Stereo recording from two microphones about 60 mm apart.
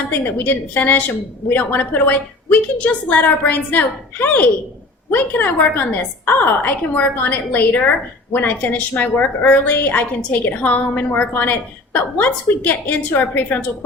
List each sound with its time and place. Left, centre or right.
0.1 s a woman's voice: left